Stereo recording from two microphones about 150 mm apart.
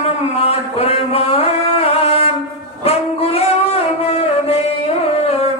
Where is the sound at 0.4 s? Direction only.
40° left (ahead or behind).